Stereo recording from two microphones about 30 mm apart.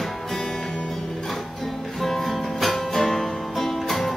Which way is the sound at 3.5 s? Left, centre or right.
Centre.